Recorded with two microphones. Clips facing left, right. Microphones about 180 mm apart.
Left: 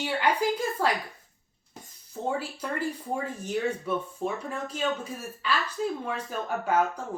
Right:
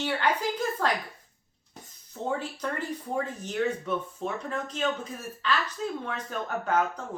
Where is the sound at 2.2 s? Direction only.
10° left (ahead or behind).